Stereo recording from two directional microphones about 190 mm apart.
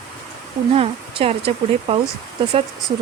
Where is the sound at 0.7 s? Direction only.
30° right (ahead or behind).